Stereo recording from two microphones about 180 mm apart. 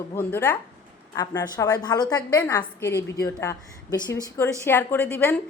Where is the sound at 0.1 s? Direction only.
10° left (ahead or behind).